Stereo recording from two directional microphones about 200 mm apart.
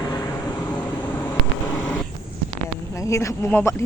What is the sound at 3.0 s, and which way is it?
Speech, 15° left (ahead or behind).